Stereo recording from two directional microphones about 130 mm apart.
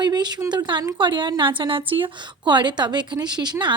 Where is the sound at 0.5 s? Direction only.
35° right (ahead or behind).